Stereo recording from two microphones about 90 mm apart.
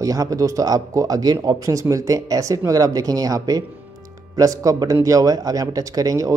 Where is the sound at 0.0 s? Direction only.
40° right (ahead or behind).